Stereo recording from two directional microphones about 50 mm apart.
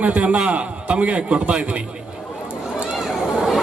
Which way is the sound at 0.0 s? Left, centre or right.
Right.